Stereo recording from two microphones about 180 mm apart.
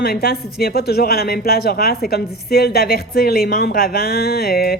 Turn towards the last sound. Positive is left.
turn(degrees=60)  # may be behind; listen again after turning